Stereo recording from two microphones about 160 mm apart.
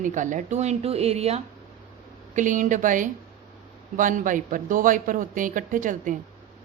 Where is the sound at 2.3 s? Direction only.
55° right (ahead or behind).